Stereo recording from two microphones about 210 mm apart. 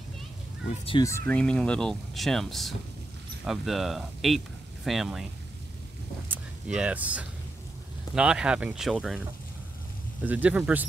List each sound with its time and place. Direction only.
0.7 s speech: 25° left (ahead or behind)
1.0 s speech: 10° left (ahead or behind)
6.2 s speech: 5° right (ahead or behind)
10.2 s a man's voice: 5° right (ahead or behind)